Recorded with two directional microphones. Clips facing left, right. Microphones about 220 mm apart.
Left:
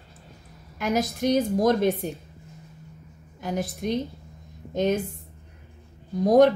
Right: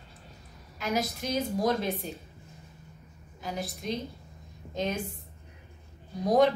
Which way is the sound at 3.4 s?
55° left (ahead or behind).